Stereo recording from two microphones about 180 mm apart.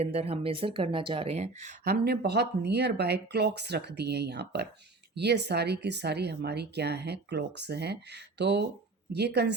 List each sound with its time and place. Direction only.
0.0 s speech: 35° right (ahead or behind); by 9.6 s 65° right (ahead or behind)